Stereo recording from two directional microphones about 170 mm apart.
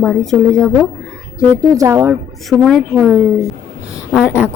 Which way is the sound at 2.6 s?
Centre (ahead or behind).